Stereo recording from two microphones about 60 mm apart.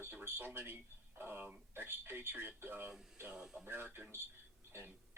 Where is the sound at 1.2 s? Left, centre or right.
Right.